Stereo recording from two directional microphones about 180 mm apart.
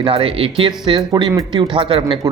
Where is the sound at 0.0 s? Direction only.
30° right (ahead or behind).